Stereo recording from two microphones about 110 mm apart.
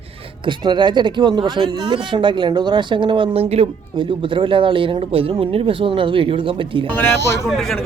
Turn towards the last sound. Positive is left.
turn(degrees=0)  # may be behind; listen again after turning